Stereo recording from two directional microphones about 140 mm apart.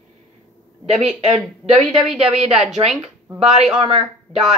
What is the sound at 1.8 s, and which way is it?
A woman's voice, centre (ahead or behind).